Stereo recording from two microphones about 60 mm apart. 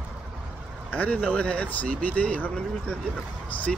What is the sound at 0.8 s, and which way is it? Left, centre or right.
Speech, left.